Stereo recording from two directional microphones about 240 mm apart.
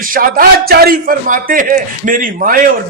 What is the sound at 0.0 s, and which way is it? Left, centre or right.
A man's voice, right.